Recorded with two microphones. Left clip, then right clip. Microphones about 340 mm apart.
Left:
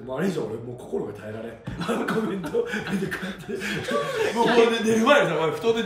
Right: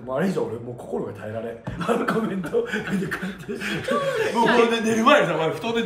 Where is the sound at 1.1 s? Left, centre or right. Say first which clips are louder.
Right 4 dB; centre.